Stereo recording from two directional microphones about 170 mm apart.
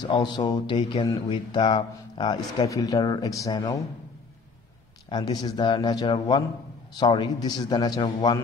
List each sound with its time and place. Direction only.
0.0 s speech: 25° left (ahead or behind)
5.1 s speech: 25° left (ahead or behind)